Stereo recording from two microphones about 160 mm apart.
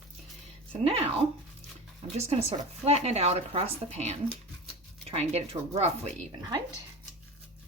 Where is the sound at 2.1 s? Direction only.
40° right (ahead or behind).